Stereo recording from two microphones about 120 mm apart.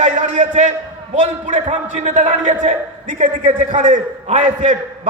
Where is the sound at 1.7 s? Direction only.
80° right.